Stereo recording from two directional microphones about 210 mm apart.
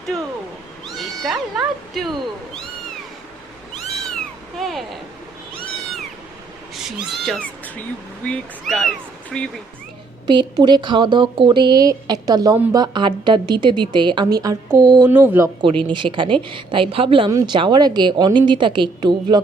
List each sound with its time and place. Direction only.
0.9 s speech: centre (ahead or behind)
4.5 s speech: centre (ahead or behind)
7.2 s speech: 5° left (ahead or behind)
10.2 s a woman's voice: 20° right (ahead or behind)
15.9 s a woman's voice: 25° right (ahead or behind)